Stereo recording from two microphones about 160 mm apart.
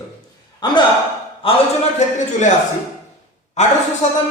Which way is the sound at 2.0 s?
45° left (ahead or behind).